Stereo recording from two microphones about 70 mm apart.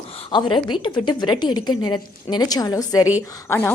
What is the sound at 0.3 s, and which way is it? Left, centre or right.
A woman's voice, left.